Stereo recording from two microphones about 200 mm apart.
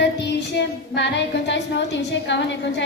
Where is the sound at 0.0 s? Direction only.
60° left (ahead or behind).